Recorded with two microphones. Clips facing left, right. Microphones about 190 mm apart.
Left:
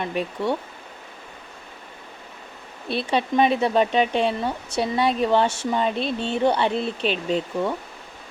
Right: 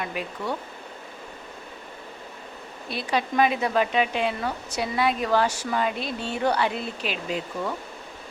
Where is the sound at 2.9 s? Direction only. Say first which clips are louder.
Left 4 dB; 30° left (ahead or behind).